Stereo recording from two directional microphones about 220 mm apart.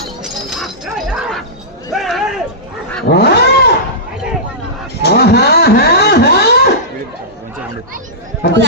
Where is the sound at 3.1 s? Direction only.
45° left (ahead or behind).